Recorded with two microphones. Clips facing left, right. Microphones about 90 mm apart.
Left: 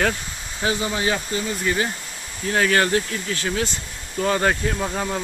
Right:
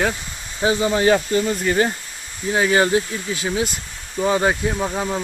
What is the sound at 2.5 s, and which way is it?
Speech, 15° right (ahead or behind).